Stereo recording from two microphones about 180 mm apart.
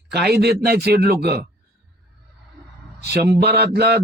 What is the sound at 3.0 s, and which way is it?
Speech, 65° right (ahead or behind).